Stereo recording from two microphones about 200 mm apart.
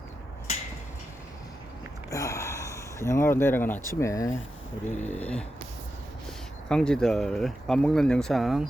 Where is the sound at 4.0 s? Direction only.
15° left (ahead or behind).